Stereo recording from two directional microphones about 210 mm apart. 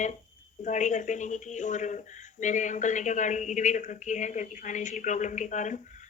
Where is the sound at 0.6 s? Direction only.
35° left (ahead or behind).